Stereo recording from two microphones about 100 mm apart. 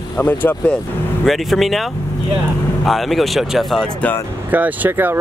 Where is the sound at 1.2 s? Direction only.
Centre (ahead or behind).